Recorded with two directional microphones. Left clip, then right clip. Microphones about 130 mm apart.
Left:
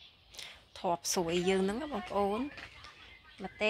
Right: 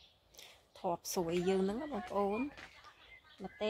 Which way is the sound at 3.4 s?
Centre (ahead or behind).